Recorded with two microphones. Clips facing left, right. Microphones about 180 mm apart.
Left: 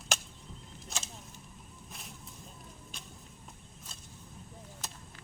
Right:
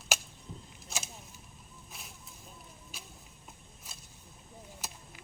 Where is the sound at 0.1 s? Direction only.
5° right (ahead or behind).